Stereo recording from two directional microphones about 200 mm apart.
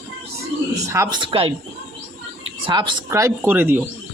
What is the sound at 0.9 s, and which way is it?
Speech, 20° right (ahead or behind).